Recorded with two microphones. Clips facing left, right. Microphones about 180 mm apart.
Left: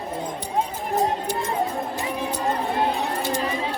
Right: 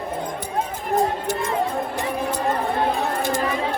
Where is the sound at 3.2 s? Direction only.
50° right (ahead or behind).